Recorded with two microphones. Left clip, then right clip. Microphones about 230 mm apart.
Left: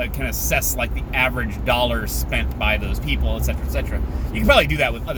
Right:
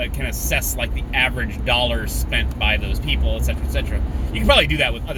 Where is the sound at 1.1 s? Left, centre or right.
Centre.